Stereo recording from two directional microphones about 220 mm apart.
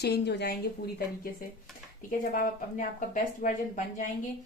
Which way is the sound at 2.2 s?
40° left (ahead or behind).